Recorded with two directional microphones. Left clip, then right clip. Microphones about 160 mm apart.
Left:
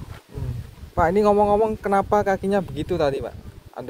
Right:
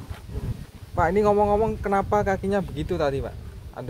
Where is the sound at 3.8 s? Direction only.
55° left (ahead or behind).